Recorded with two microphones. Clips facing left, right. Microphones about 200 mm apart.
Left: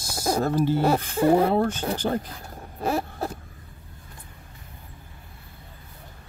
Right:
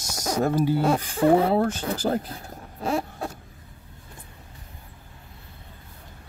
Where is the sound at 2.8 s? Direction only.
Centre (ahead or behind).